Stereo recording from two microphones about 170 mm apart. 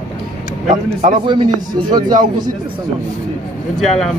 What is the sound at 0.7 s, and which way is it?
Speech, 45° right (ahead or behind).